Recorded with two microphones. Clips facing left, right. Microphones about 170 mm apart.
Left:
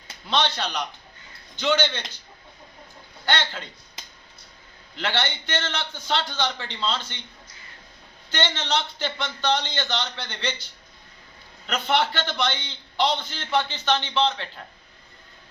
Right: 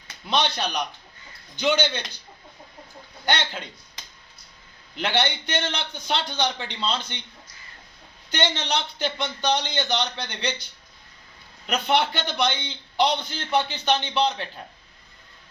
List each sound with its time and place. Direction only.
0.3 s a man's voice: 10° right (ahead or behind)
3.2 s a man's voice: 15° right (ahead or behind)
4.9 s a man's voice: 15° right (ahead or behind)
8.3 s a man's voice: 15° right (ahead or behind)